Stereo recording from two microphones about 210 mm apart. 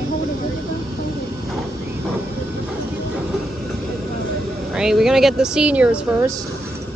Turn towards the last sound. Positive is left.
turn(degrees=-5)  # may be behind; listen again after turning